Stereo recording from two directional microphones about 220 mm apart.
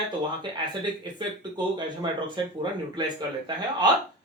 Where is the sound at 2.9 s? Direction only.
20° right (ahead or behind).